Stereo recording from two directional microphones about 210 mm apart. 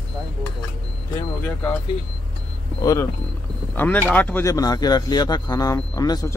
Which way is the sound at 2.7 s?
15° left (ahead or behind).